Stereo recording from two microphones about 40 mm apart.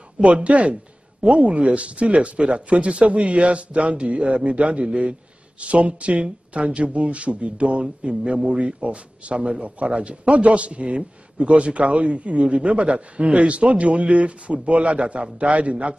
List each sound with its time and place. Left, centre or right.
0.2 s a man's voice: right